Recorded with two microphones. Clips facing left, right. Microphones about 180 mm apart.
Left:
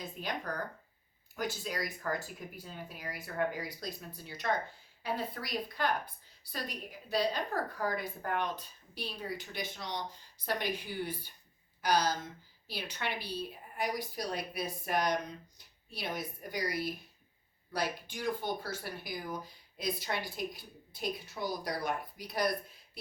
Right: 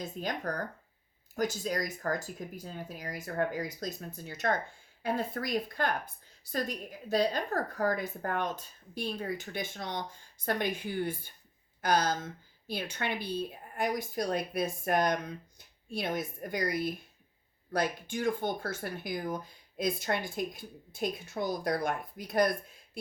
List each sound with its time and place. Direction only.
0.0 s speech: 45° right (ahead or behind)